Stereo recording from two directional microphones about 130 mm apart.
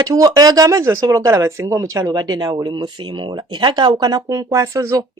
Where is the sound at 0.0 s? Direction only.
25° right (ahead or behind).